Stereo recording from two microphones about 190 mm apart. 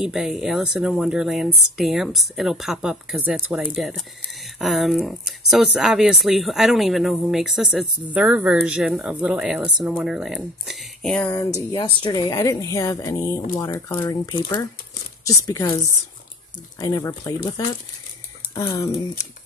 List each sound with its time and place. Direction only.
0.0 s speech: centre (ahead or behind)
11.5 s speech: 25° left (ahead or behind)
16.8 s speech: 20° left (ahead or behind)
18.5 s speech: 20° left (ahead or behind)